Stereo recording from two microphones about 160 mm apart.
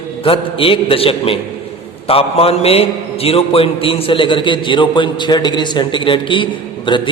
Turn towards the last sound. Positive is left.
turn(degrees=30)  # may be behind; listen again after turning